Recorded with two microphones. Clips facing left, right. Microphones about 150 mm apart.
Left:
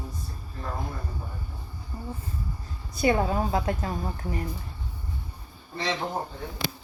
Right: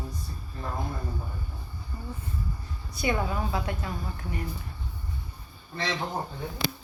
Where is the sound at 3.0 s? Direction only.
35° left (ahead or behind).